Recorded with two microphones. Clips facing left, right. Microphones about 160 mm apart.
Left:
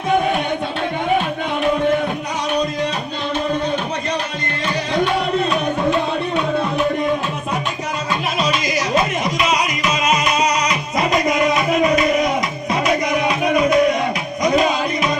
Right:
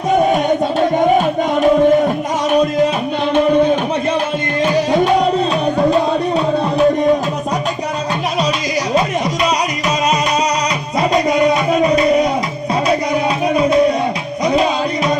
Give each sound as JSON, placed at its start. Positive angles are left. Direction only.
{"t": 5.9, "sound": "music", "side_deg": -35}
{"t": 11.1, "sound": "music", "side_deg": -35}
{"t": 13.5, "sound": "music", "side_deg": -30}